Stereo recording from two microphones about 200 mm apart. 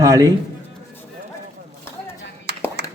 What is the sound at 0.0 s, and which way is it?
Speech, 15° right (ahead or behind).